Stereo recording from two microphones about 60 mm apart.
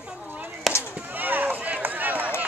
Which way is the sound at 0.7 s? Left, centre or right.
Centre.